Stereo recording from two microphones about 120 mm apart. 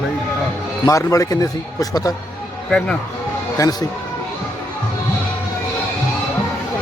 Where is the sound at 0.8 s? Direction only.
25° left (ahead or behind).